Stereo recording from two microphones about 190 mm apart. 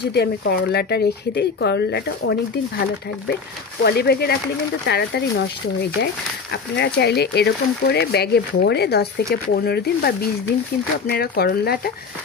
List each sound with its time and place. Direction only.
0.0 s speech: 60° left (ahead or behind)
3.8 s speech: 55° left (ahead or behind)
6.5 s speech: 60° left (ahead or behind)